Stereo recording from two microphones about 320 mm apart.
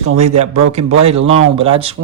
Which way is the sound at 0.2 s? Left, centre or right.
Right.